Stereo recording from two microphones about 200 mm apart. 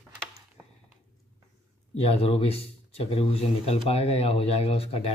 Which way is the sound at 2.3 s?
30° left (ahead or behind).